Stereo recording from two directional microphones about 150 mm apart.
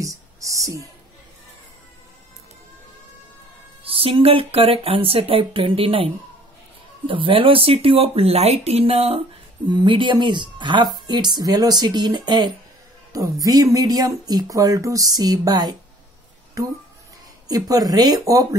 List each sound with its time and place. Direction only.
0.0 s music: 20° right (ahead or behind)
3.8 s speech: 40° right (ahead or behind)
9.7 s speech: 30° right (ahead or behind)
17.5 s speech: 25° right (ahead or behind)